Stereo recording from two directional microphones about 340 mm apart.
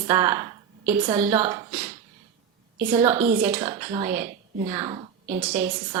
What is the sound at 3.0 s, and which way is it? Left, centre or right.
A woman's voice, centre.